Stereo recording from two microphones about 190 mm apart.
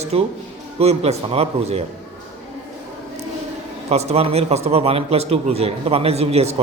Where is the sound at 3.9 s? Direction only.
35° right (ahead or behind).